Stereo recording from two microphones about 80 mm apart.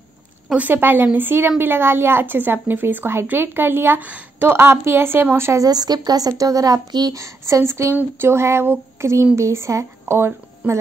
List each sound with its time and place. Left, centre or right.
0.6 s a woman's voice: right
5.6 s speech: right
7.2 s a sound: right
10.6 s a woman's voice: centre